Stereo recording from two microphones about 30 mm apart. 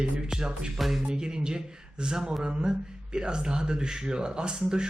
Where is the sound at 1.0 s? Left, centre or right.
Right.